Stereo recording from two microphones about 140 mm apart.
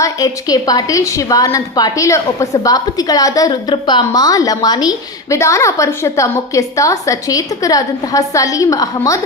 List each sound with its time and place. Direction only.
0.0 s a woman's voice: 25° left (ahead or behind)